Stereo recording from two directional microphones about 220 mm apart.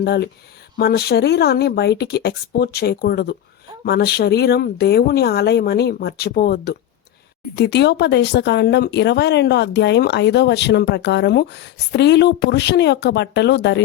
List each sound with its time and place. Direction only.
0.0 s speech: 45° left (ahead or behind)